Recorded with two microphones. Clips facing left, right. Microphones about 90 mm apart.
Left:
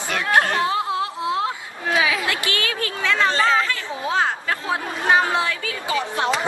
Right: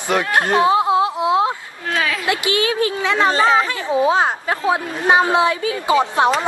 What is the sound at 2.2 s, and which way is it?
A woman's voice, 20° right (ahead or behind).